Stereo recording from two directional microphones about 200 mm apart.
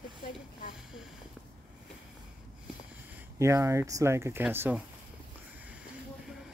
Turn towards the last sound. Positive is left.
turn(degrees=-5)  # may be behind; listen again after turning